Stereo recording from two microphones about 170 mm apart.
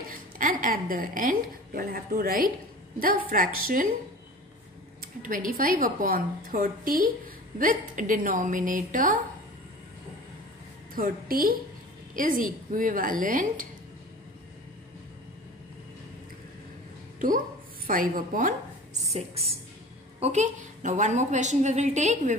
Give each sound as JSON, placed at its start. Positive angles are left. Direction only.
{"t": 0.1, "sound": "a woman's voice", "side_deg": -55}
{"t": 5.2, "sound": "a woman's voice", "side_deg": -55}
{"t": 11.0, "sound": "a woman's voice", "side_deg": -55}
{"t": 17.8, "sound": "a woman's voice", "side_deg": -55}
{"t": 19.0, "sound": "a woman's voice", "side_deg": -35}